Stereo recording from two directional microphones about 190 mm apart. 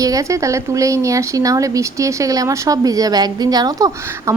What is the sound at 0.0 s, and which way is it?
A woman's voice, 15° right (ahead or behind).